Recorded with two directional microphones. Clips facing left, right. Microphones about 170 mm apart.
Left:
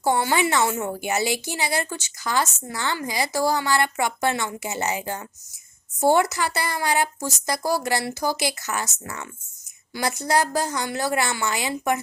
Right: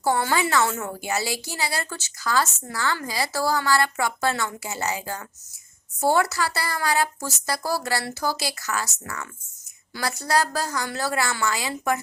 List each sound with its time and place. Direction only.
0.0 s a woman's voice: 20° left (ahead or behind)